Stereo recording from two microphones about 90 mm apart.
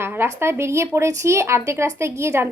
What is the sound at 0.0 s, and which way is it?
Speech, 25° right (ahead or behind).